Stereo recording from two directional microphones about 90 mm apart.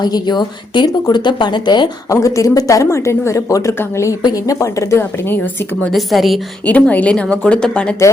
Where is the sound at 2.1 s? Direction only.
35° left (ahead or behind).